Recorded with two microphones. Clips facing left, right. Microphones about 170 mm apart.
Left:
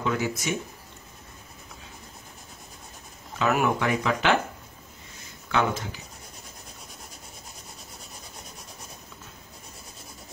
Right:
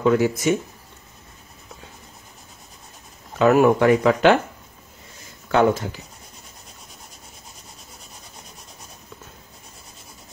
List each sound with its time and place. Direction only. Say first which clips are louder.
0.0 s speech: right 9 dB; 45° right (ahead or behind)
3.3 s speech: right 9 dB; 45° right (ahead or behind)
5.5 s speech: right 8 dB; 45° right (ahead or behind)